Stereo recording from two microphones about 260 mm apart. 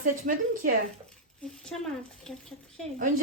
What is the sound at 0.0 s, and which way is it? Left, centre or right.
Speech, right.